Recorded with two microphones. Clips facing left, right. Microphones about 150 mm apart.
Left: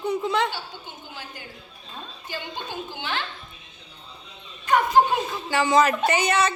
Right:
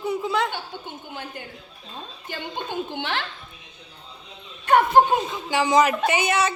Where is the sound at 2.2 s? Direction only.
55° right (ahead or behind).